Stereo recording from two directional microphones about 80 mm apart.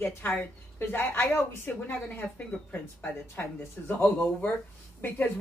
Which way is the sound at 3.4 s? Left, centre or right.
Left.